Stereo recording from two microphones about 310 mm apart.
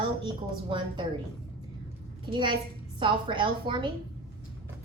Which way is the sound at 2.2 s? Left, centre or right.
Centre.